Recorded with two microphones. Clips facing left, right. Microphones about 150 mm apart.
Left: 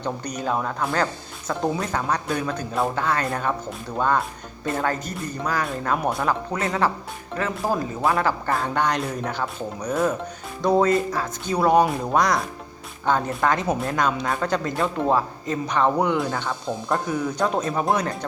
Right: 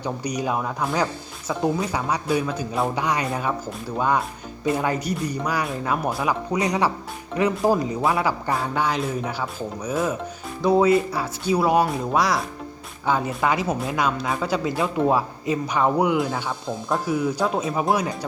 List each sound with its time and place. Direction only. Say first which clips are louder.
0.0 s speech: right 1 dB; 10° right (ahead or behind)